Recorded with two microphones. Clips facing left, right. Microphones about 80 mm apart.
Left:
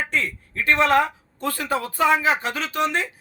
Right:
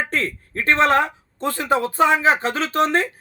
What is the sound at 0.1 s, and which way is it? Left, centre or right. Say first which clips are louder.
Speech: right 2 dB; right.